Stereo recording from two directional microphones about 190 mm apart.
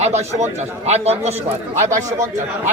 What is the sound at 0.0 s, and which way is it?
A man's voice, 35° right (ahead or behind).